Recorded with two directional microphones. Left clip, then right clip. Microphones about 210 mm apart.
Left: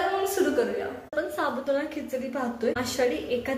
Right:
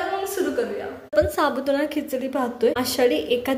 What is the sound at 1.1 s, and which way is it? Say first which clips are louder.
A woman's voice: right 8 dB; 40° right (ahead or behind).